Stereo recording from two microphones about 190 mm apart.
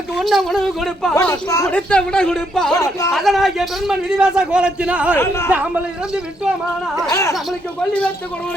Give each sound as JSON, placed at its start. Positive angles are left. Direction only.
{"t": 0.2, "sound": "a man's voice", "side_deg": 0}
{"t": 1.1, "sound": "speech", "side_deg": 15}
{"t": 1.7, "sound": "a man's voice", "side_deg": 5}
{"t": 5.1, "sound": "speech", "side_deg": 15}
{"t": 5.5, "sound": "a man's voice", "side_deg": -10}
{"t": 7.1, "sound": "speech", "side_deg": 15}